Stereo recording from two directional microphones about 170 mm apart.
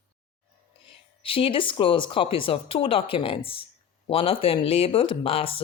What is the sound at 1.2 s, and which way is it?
Speech, 30° left (ahead or behind).